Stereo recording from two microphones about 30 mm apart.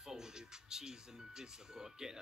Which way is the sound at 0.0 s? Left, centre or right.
Centre.